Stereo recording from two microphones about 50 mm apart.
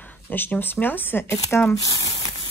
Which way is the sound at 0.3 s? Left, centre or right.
Left.